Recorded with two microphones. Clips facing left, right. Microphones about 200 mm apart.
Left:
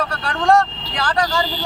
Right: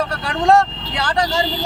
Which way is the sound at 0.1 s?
25° right (ahead or behind).